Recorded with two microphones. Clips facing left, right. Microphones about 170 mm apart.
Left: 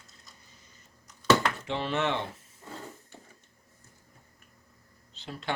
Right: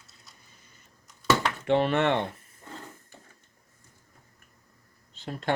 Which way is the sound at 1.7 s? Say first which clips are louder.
Right 10 dB; 55° right (ahead or behind).